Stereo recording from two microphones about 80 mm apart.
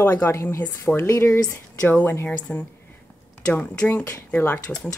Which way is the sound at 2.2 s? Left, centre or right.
Centre.